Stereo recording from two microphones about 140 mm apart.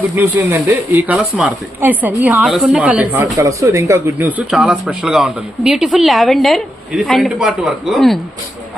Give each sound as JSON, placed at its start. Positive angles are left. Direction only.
{"t": 0.2, "sound": "speech", "side_deg": -15}
{"t": 3.3, "sound": "speech", "side_deg": -20}